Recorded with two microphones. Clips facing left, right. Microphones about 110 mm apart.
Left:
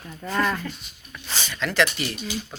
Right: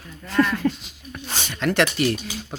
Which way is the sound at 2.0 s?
55° right (ahead or behind).